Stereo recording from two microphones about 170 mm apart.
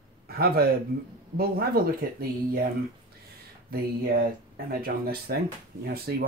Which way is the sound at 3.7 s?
65° right (ahead or behind).